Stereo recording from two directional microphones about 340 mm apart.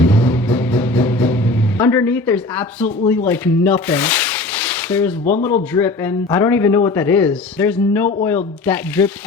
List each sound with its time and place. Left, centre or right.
0.0 s vehicle: centre
1.8 s speech: centre
5.2 s speech: left
5.7 s speech: centre